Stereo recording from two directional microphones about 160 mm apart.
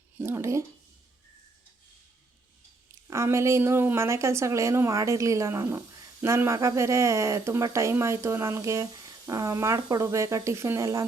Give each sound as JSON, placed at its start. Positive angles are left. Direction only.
{"t": 0.2, "sound": "speech", "side_deg": -15}
{"t": 3.1, "sound": "a woman's voice", "side_deg": -15}